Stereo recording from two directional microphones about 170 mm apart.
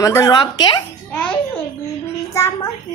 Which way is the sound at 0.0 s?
20° left (ahead or behind).